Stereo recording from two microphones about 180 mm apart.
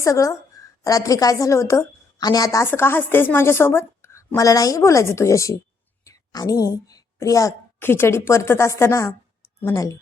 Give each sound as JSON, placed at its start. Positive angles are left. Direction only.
{"t": 0.0, "sound": "a woman's voice", "side_deg": 15}